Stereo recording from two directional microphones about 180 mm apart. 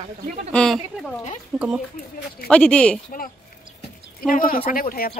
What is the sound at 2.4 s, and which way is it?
Speech, 5° left (ahead or behind).